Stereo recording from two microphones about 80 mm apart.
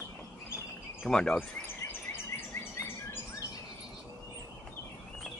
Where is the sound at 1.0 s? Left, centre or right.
Centre.